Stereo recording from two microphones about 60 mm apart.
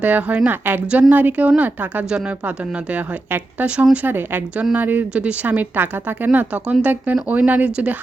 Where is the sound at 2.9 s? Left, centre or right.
Right.